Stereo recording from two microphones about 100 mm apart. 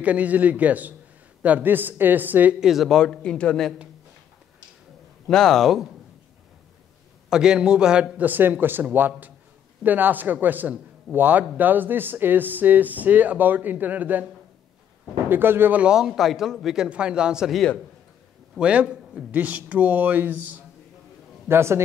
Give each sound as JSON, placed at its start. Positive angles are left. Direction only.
{"t": 0.0, "sound": "a man's voice", "side_deg": -15}
{"t": 2.6, "sound": "speech", "side_deg": 0}
{"t": 5.2, "sound": "speech", "side_deg": 5}
{"t": 7.2, "sound": "a man's voice", "side_deg": -5}
{"t": 15.2, "sound": "a man's voice", "side_deg": -20}
{"t": 18.6, "sound": "a man's voice", "side_deg": -10}
{"t": 21.5, "sound": "a man's voice", "side_deg": -25}